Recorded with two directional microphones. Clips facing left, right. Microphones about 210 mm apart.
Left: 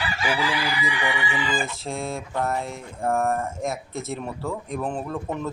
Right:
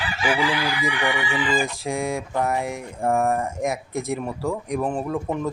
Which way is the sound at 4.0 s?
10° right (ahead or behind).